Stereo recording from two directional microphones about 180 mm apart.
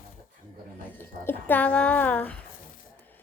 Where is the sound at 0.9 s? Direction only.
10° left (ahead or behind).